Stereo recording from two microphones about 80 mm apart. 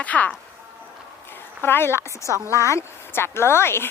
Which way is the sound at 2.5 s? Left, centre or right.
Left.